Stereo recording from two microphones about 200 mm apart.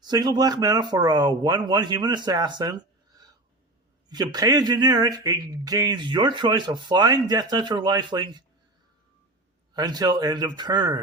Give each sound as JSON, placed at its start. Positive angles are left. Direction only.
{"t": 0.0, "sound": "speech", "side_deg": -20}
{"t": 4.1, "sound": "speech", "side_deg": -20}
{"t": 9.7, "sound": "speech", "side_deg": -20}